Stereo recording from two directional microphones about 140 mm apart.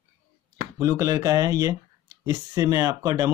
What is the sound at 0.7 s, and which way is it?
Speech, 25° right (ahead or behind).